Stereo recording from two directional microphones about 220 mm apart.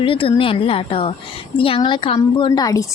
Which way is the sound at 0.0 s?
25° left (ahead or behind).